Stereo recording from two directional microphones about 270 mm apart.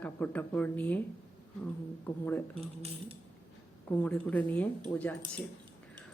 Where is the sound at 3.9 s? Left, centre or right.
Centre.